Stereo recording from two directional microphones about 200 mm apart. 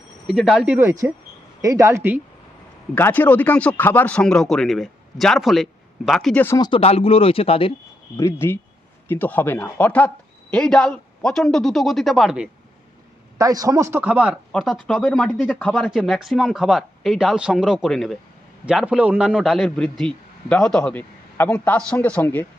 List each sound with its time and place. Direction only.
0.3 s speech: centre (ahead or behind)
2.9 s speech: 10° left (ahead or behind)
6.7 s speech: 25° left (ahead or behind)
8.1 s speech: 15° left (ahead or behind); by 12.5 s 5° right (ahead or behind)
13.4 s speech: 15° right (ahead or behind); by 22.4 s 10° left (ahead or behind)